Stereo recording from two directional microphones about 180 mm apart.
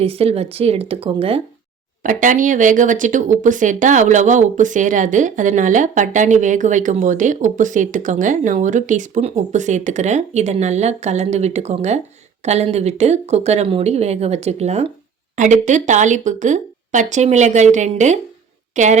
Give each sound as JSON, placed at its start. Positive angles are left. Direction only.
{"t": 0.0, "sound": "a woman's voice", "side_deg": -35}
{"t": 2.0, "sound": "a woman's voice", "side_deg": -45}